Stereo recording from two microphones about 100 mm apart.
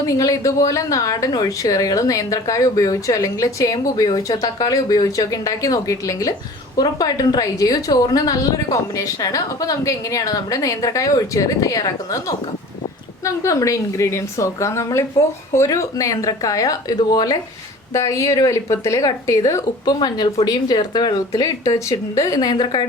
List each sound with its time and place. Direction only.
0.1 s a woman's voice: 35° left (ahead or behind)
13.2 s a woman's voice: 30° left (ahead or behind); by 22.9 s 50° left (ahead or behind)